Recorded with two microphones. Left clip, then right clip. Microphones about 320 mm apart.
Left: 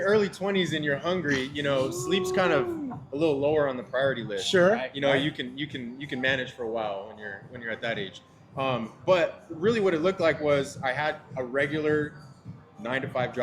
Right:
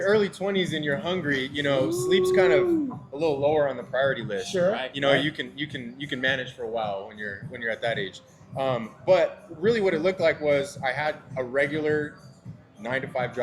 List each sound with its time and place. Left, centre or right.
0.0 s speech: centre
4.4 s speech: left
4.9 s speech: centre